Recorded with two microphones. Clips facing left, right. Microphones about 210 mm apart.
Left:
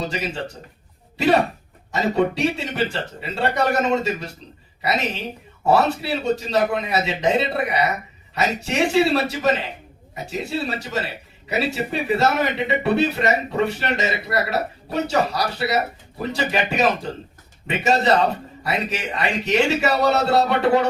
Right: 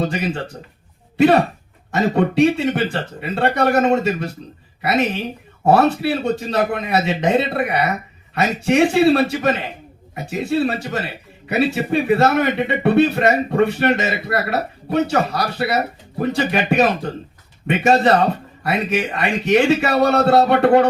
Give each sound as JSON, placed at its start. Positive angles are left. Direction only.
{"t": 0.0, "sound": "speech", "side_deg": -55}